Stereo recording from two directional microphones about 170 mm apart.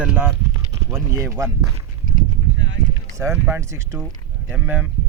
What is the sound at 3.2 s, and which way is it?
Speech, 15° right (ahead or behind).